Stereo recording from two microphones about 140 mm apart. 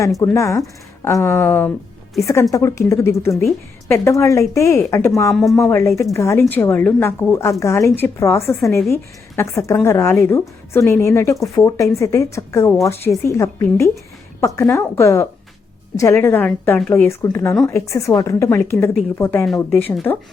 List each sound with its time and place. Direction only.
0.3 s a woman's voice: 20° left (ahead or behind)
5.3 s speech: centre (ahead or behind)
5.6 s a woman's voice: 15° left (ahead or behind)